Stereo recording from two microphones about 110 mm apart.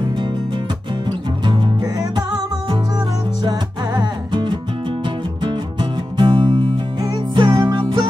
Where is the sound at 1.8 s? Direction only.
35° right (ahead or behind).